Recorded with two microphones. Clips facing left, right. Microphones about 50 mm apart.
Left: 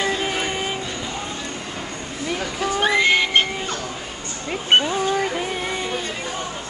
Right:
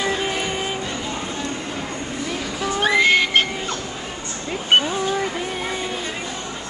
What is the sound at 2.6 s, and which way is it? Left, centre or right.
Whistle, centre.